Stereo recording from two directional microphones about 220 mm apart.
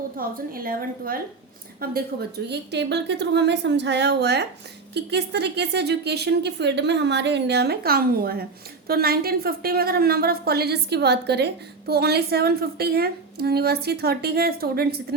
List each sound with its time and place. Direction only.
0.2 s a woman's voice: 40° right (ahead or behind)